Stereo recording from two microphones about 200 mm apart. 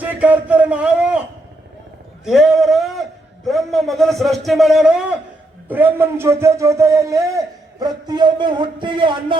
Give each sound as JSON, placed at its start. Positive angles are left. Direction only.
{"t": 0.0, "sound": "a man's voice", "side_deg": -5}
{"t": 2.2, "sound": "a man's voice", "side_deg": 0}